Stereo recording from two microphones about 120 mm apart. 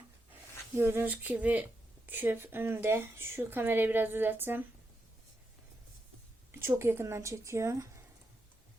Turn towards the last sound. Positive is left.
turn(degrees=-25)  # may be behind; listen again after turning